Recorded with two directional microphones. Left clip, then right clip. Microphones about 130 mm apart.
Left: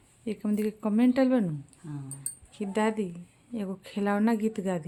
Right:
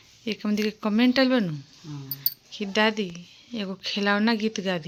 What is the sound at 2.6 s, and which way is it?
Speech, 5° left (ahead or behind).